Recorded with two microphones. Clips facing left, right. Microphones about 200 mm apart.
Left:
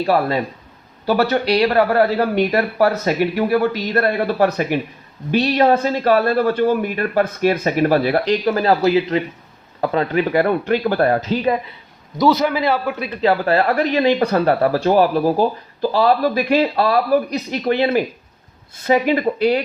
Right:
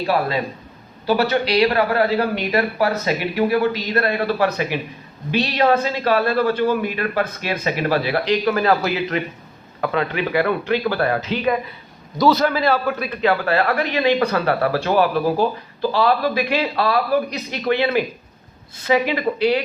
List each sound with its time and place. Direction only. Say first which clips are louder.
0.1 s speech: left 2 dB; 50° left (ahead or behind)
12.1 s a man's voice: left 1 dB; 20° left (ahead or behind)
13.4 s speech: left 3 dB; 35° left (ahead or behind)